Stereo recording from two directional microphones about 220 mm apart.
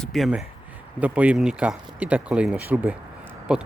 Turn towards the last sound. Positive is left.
turn(degrees=-5)  # may be behind; listen again after turning